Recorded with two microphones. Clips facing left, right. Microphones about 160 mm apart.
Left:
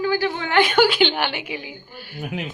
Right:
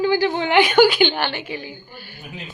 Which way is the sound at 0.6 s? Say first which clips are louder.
Right 3 dB; centre (ahead or behind).